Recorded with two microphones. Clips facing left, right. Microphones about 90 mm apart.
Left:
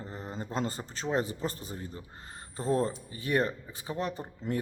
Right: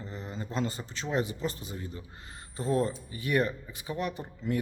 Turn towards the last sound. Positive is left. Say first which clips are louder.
# right 1 dB
turn(degrees=35)  # may be behind; listen again after turning